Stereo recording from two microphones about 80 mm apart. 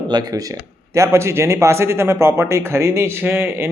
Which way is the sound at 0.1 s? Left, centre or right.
Right.